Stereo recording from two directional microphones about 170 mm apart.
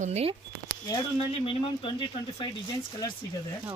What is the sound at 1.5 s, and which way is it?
Speech, 30° left (ahead or behind).